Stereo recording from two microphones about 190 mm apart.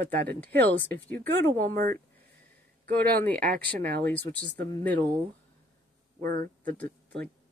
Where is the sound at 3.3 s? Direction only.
50° right (ahead or behind).